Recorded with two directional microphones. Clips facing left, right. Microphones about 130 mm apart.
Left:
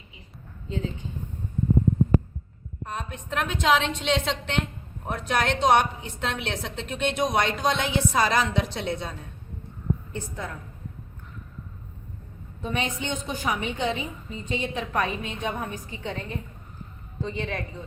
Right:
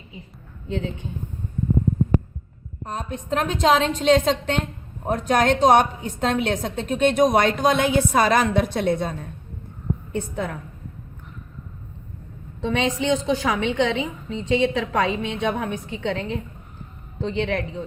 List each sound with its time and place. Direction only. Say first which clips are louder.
0.7 s speech: right 4 dB; 65° right (ahead or behind)
2.8 s a woman's voice: right 4 dB; 35° right (ahead or behind)
10.2 s a woman's voice: right 7 dB; 65° right (ahead or behind)
12.6 s a woman's voice: right 8 dB; 90° right
17.2 s speech: right 7 dB; 70° right (ahead or behind)